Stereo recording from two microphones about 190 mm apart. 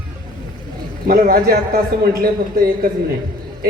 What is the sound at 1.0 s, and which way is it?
Speech, 50° right (ahead or behind).